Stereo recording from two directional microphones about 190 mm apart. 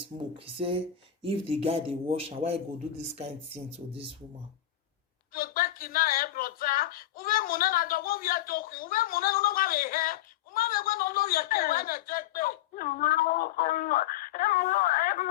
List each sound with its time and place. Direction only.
0.2 s speech: 30° right (ahead or behind)
5.3 s speech: 50° left (ahead or behind)